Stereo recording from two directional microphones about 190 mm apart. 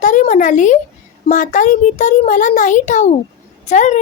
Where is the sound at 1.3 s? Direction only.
40° left (ahead or behind).